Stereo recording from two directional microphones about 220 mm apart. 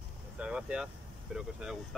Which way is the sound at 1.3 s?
Centre (ahead or behind).